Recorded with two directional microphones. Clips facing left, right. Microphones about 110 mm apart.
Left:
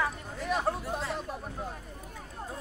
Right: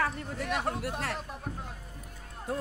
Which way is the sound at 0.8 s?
70° right (ahead or behind).